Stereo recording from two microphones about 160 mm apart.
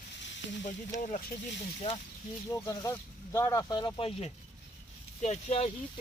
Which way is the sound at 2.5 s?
20° left (ahead or behind).